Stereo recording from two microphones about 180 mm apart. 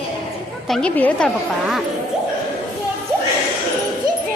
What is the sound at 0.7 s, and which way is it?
Speech, 5° left (ahead or behind).